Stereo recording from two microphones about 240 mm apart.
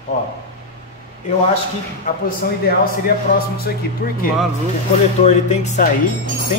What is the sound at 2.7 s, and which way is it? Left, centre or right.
Speech, left.